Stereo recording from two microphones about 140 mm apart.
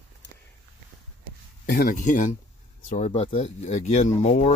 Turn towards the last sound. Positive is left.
turn(degrees=45)  # may be behind; listen again after turning